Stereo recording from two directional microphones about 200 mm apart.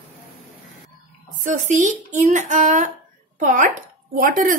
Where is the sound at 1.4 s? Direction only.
40° right (ahead or behind).